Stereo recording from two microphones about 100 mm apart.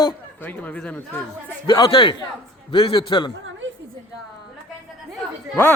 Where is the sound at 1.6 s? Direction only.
45° left (ahead or behind).